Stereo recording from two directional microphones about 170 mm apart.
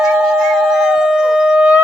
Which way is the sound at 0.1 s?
5° right (ahead or behind).